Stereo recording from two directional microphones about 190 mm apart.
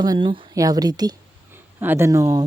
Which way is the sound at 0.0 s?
25° right (ahead or behind).